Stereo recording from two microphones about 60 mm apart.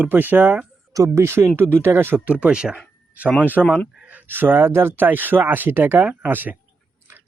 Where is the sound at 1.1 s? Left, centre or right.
Right.